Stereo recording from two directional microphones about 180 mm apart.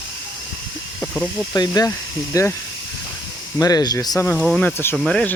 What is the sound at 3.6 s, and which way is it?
Speech, 20° left (ahead or behind).